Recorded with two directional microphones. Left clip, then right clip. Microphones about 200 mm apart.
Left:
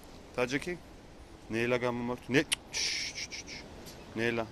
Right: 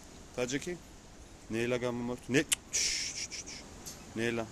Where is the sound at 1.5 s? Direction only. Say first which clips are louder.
Left 2 dB; 15° right (ahead or behind).